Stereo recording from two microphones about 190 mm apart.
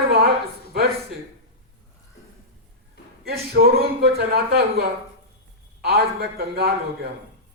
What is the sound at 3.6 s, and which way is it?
A man's voice, 50° right (ahead or behind).